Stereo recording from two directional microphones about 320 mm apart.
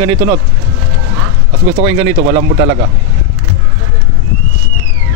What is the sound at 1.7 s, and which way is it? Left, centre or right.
Speech, centre.